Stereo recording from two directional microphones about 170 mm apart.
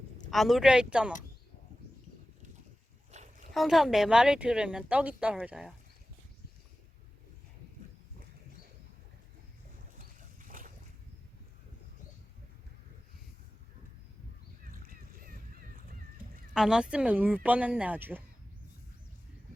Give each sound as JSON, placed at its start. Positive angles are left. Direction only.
{"t": 0.3, "sound": "speech", "side_deg": 0}
{"t": 3.1, "sound": "a sound", "side_deg": -40}
{"t": 3.5, "sound": "speech", "side_deg": 0}
{"t": 10.0, "sound": "boat", "side_deg": -50}
{"t": 14.6, "sound": "a sound", "side_deg": -55}
{"t": 16.6, "sound": "speech", "side_deg": -5}